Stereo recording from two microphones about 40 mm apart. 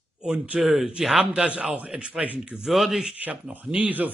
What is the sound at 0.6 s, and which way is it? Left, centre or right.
Speech, centre.